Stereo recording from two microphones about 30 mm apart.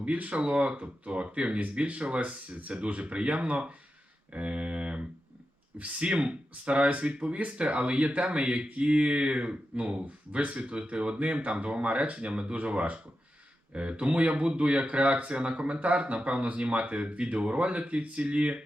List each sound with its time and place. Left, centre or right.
0.0 s speech: right
0.4 s speech: right
4.3 s a sound: right
5.8 s speech: right
12.5 s speech: right